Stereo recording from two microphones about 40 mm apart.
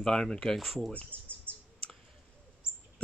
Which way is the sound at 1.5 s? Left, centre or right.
Right.